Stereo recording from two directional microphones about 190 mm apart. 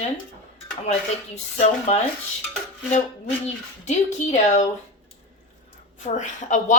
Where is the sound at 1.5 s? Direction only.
35° left (ahead or behind).